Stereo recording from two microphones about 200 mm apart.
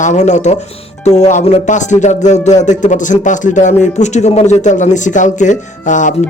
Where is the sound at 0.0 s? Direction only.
35° left (ahead or behind).